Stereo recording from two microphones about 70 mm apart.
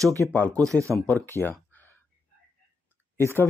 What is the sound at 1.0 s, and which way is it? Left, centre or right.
Speech, left.